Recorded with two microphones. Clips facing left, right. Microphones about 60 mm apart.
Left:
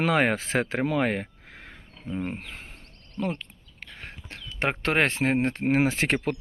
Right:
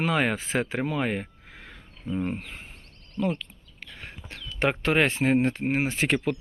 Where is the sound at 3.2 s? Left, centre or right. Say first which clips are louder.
Right 2 dB; left.